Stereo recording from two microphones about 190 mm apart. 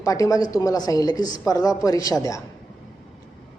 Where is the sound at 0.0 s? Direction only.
20° left (ahead or behind).